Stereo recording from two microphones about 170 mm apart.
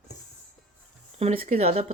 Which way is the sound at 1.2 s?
35° right (ahead or behind).